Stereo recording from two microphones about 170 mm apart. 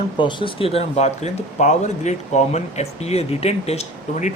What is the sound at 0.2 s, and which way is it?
Speech, 30° left (ahead or behind).